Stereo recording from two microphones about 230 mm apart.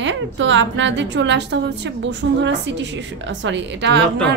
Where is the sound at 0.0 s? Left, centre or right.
Right.